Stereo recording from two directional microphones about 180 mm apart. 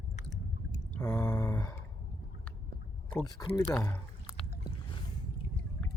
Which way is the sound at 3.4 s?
15° left (ahead or behind).